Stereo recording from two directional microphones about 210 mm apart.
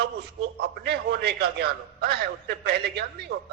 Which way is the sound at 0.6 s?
50° right (ahead or behind).